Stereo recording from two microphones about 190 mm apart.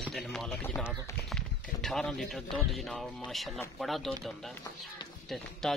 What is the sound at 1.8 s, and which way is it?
Speech, centre (ahead or behind).